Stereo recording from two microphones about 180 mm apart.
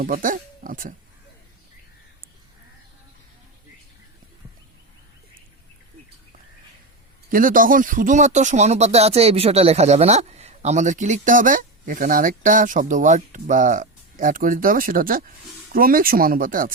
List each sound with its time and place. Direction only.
0.0 s a man's voice: 50° right (ahead or behind)
7.3 s a man's voice: 50° right (ahead or behind)